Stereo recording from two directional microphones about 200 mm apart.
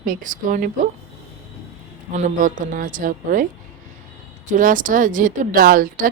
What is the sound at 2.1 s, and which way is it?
A woman's voice, 40° right (ahead or behind).